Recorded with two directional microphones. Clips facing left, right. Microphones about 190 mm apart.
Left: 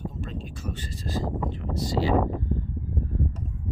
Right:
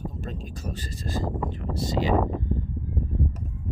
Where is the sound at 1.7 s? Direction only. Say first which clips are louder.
Even; 25° right (ahead or behind).